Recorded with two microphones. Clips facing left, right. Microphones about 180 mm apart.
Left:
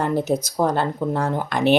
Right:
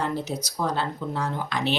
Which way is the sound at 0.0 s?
50° left (ahead or behind).